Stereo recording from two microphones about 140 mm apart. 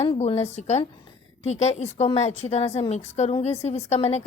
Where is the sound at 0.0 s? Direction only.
45° left (ahead or behind).